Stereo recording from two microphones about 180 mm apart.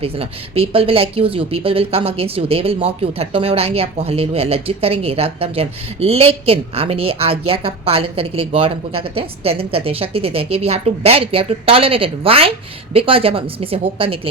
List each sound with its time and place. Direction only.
0.0 s speech: 35° right (ahead or behind)